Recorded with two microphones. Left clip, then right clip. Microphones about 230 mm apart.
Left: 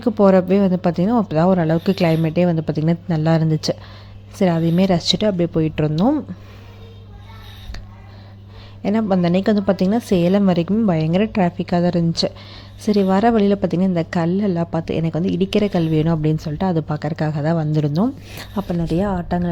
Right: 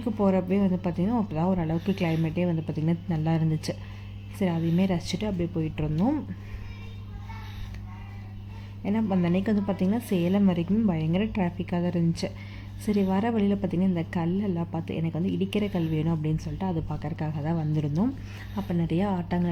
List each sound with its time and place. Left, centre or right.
0.0 s a woman's voice: left
8.8 s a woman's voice: centre